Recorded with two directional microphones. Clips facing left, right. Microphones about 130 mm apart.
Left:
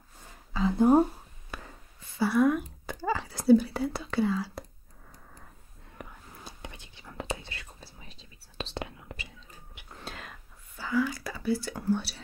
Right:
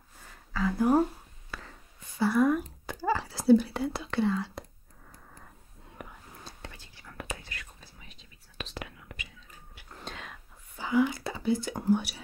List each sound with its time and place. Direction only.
0.5 s a sound: 20° left (ahead or behind)
1.5 s whispering: 15° left (ahead or behind)
2.1 s whispering: centre (ahead or behind)
6.0 s whispering: 5° right (ahead or behind)
6.4 s whispering: 20° left (ahead or behind)
9.9 s whispering: centre (ahead or behind)
10.8 s whispering: 20° right (ahead or behind)